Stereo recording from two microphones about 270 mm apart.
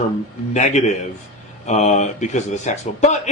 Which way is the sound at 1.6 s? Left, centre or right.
Left.